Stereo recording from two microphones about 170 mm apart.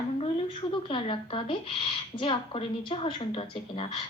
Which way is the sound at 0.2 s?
30° left (ahead or behind).